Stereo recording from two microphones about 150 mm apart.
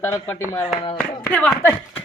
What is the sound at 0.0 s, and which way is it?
Speech, 20° left (ahead or behind).